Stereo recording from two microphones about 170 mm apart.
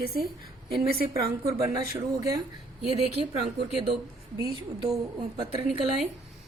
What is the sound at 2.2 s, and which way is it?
Speech, 20° right (ahead or behind).